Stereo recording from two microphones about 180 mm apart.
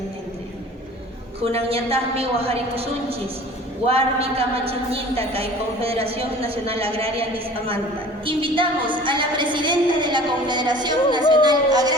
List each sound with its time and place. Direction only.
1.4 s a woman's voice: 35° right (ahead or behind)